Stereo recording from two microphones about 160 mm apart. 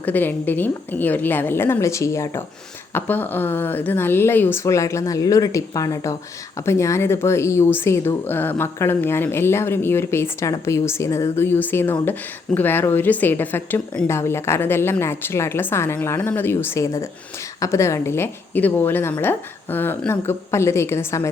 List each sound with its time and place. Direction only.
0.0 s a woman's voice: 10° left (ahead or behind)